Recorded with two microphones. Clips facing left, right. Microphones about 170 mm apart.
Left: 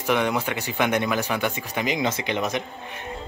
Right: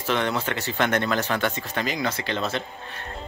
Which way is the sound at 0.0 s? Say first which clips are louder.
Left 2 dB; 15° left (ahead or behind).